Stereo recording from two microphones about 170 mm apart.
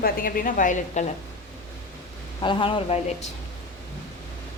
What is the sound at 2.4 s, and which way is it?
Speech, 30° left (ahead or behind).